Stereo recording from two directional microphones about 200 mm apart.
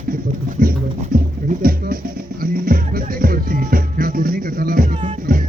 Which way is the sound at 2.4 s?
45° right (ahead or behind).